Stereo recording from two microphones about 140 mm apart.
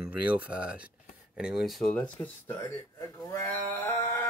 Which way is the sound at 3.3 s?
15° left (ahead or behind).